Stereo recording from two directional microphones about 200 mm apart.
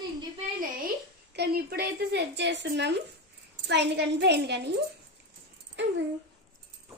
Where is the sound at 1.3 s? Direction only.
55° right (ahead or behind).